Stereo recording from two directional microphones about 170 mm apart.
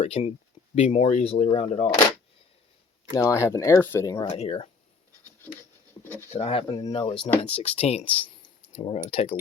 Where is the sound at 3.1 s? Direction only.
20° left (ahead or behind).